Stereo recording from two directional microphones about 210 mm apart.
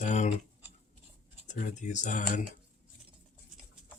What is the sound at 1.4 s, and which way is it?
Speech, 35° left (ahead or behind).